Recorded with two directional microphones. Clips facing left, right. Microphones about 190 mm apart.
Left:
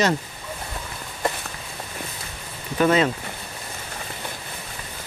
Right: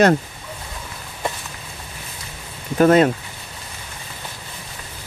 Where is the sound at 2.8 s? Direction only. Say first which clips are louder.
Right 5 dB; 50° right (ahead or behind).